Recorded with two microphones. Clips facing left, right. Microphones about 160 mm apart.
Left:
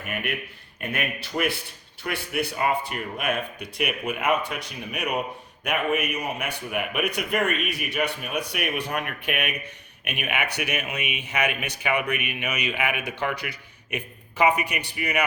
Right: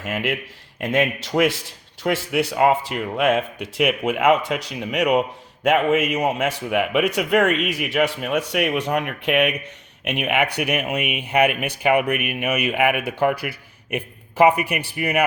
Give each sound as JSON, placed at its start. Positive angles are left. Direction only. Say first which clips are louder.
{"t": 0.0, "sound": "a man's voice", "louder": "right 6 dB", "side_deg": -90}
{"t": 5.6, "sound": "a man's voice", "louder": "right 8 dB", "side_deg": -90}